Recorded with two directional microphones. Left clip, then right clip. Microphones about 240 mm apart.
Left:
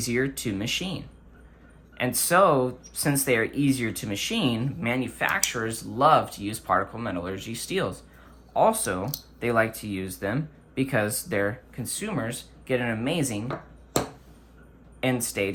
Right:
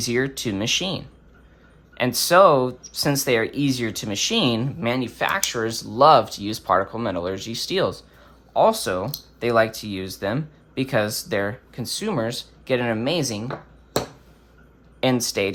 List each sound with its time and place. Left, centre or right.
0.0 s speech: centre
15.0 s speech: centre